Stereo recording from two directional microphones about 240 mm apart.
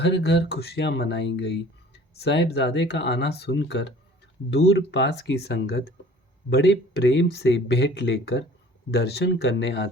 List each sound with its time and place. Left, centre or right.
0.0 s speech: left